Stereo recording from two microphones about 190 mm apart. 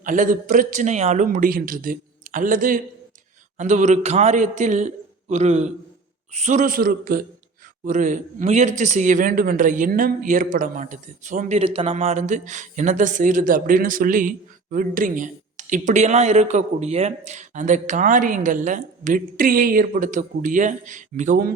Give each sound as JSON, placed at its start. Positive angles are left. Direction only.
{"t": 0.0, "sound": "speech", "side_deg": -45}